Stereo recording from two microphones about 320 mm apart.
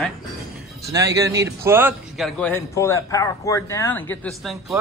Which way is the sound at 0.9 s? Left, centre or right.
Centre.